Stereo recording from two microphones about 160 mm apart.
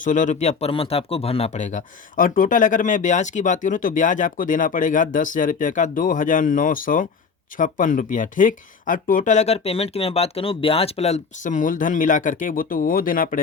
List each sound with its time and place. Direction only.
0.0 s speech: 50° left (ahead or behind)